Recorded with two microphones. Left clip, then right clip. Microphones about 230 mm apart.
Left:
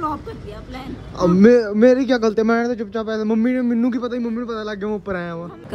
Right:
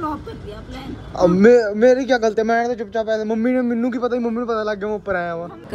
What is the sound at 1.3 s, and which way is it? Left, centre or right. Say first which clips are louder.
Speech: right 1 dB; centre.